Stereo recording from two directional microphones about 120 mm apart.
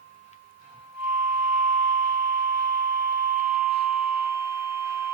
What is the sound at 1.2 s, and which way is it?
Alarm, 20° right (ahead or behind).